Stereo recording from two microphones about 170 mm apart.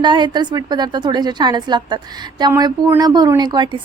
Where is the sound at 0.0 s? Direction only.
25° right (ahead or behind).